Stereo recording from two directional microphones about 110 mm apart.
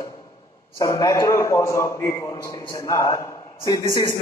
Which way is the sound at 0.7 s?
30° left (ahead or behind).